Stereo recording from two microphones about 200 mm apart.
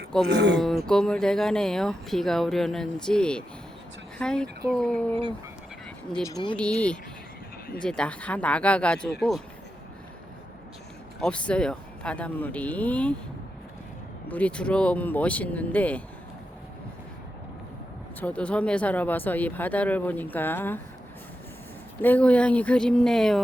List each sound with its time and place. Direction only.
0.3 s speech: 60° right (ahead or behind)
0.9 s speech: 5° left (ahead or behind)
6.2 s speech: 20° left (ahead or behind)
6.6 s speech: 5° left (ahead or behind)
11.2 s speech: 5° left (ahead or behind)
14.3 s speech: 5° left (ahead or behind)
18.2 s speech: 5° left (ahead or behind)
22.0 s speech: 5° left (ahead or behind)